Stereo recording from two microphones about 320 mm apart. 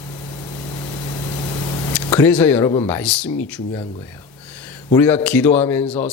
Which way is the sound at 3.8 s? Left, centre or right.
Centre.